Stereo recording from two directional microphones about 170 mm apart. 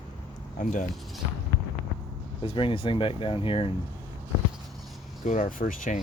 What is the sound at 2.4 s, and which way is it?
Speech, 30° left (ahead or behind).